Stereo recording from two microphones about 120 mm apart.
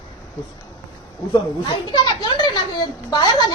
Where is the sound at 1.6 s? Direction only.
40° left (ahead or behind).